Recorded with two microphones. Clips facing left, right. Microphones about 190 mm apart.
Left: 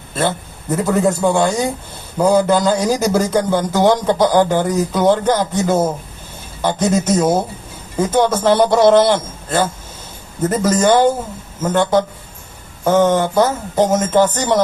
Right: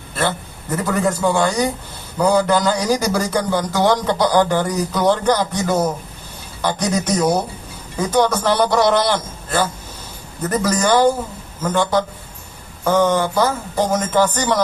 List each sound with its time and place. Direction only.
0.2 s a man's voice: 25° left (ahead or behind)